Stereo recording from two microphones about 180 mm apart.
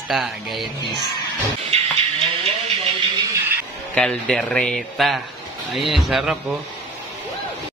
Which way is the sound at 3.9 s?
5° left (ahead or behind).